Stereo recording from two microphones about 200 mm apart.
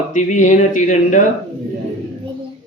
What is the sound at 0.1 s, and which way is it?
Speech, 35° left (ahead or behind).